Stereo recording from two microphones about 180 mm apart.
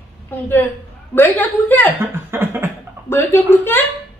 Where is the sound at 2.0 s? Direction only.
10° right (ahead or behind).